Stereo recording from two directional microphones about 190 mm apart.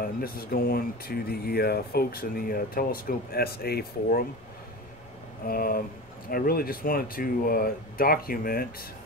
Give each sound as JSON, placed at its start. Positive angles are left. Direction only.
{"t": 0.0, "sound": "speech", "side_deg": 50}
{"t": 5.5, "sound": "speech", "side_deg": 50}